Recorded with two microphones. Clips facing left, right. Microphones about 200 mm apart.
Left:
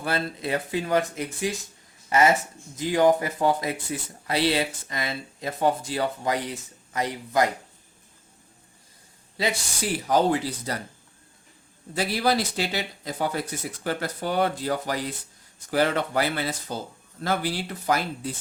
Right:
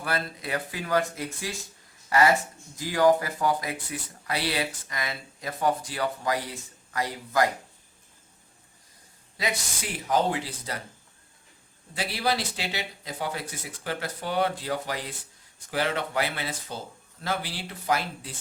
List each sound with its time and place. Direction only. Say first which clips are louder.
0.0 s speech: left 3 dB; 25° left (ahead or behind)
9.4 s speech: left 4 dB; 30° left (ahead or behind)
11.9 s speech: left 4 dB; 45° left (ahead or behind)